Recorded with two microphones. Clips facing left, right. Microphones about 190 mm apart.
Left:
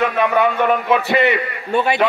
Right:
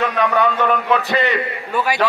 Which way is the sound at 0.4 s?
10° left (ahead or behind).